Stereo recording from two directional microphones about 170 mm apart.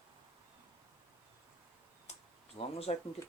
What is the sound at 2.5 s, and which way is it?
Speech, 35° left (ahead or behind).